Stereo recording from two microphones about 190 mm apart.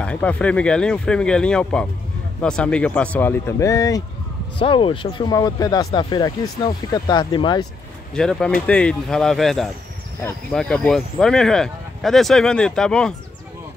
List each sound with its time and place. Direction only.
0.0 s speech: 5° left (ahead or behind); by 7.6 s 25° left (ahead or behind)
8.1 s speech: 5° left (ahead or behind)